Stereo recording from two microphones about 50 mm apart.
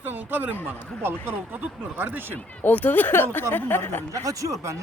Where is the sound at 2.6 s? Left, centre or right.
Left.